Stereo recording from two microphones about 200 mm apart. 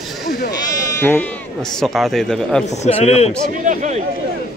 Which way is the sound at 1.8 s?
Centre (ahead or behind).